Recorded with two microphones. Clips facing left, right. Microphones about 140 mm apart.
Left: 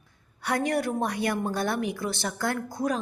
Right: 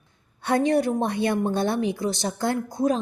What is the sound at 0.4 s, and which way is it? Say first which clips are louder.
A woman's voice: right 5 dB; 25° right (ahead or behind).